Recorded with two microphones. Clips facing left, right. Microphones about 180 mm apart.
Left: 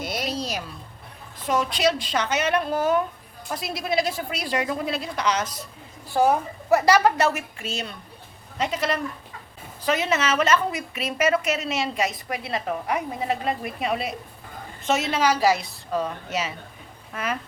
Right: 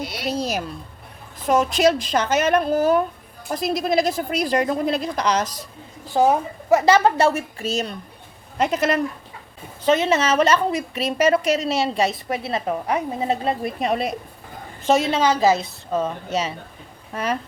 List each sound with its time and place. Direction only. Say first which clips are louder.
0.0 s a sound: left 1 dB; 45° left (ahead or behind)
1.5 s a woman's voice: right 5 dB; 45° right (ahead or behind)
6.1 s speech: right 3 dB; 20° right (ahead or behind); by 7.9 s 40° right (ahead or behind)
8.5 s a woman's voice: right 5 dB; 50° right (ahead or behind)
9.8 s a woman's voice: right 5 dB; 30° right (ahead or behind)